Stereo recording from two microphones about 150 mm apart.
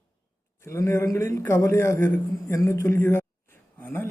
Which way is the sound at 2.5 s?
20° left (ahead or behind).